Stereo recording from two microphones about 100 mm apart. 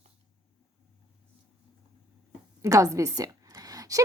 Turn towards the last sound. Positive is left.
turn(degrees=-35)  # may be behind; listen again after turning